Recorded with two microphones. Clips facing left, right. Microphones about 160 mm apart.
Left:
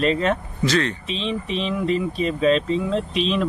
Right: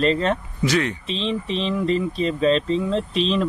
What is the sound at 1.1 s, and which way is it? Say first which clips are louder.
Speech: right 1 dB; 5° left (ahead or behind).